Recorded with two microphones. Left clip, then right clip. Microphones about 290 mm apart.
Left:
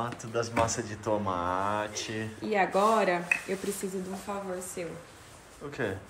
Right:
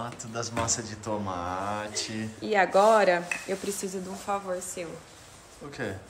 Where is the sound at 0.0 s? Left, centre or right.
Centre.